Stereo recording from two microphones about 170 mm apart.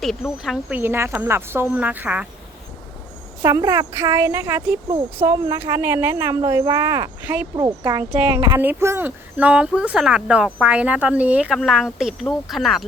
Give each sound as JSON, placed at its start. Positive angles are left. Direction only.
{"t": 0.0, "sound": "speech", "side_deg": 0}
{"t": 0.8, "sound": "speech", "side_deg": -15}
{"t": 3.4, "sound": "speech", "side_deg": -20}